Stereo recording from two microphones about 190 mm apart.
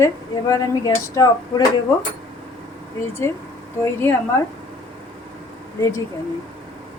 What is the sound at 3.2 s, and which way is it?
Speech, 15° left (ahead or behind).